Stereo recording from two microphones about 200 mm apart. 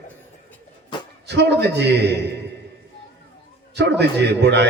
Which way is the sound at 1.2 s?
60° right (ahead or behind).